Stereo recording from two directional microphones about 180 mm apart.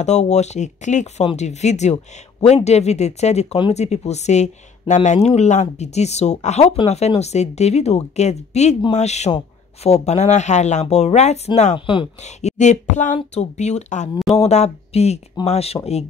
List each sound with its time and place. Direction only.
0.0 s speech: 40° left (ahead or behind)